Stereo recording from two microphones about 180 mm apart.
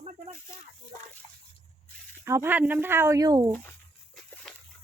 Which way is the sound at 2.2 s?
15° right (ahead or behind).